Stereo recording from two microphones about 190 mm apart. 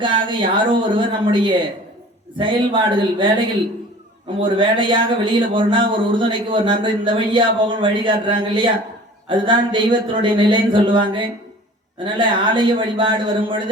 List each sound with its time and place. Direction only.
0.0 s speech: 25° right (ahead or behind)